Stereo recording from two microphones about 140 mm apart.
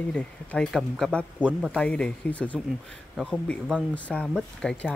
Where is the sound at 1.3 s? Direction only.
10° right (ahead or behind).